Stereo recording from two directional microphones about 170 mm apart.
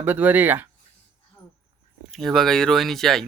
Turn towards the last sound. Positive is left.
turn(degrees=0)  # may be behind; listen again after turning